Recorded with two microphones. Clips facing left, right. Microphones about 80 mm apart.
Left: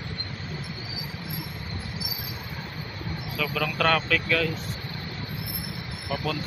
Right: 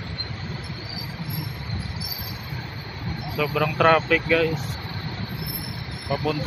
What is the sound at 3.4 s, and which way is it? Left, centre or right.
Speech, centre.